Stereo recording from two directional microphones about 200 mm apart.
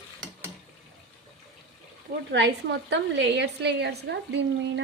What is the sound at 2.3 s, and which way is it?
A woman's voice, 60° right (ahead or behind).